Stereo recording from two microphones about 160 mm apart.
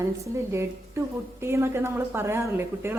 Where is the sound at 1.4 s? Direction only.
15° right (ahead or behind).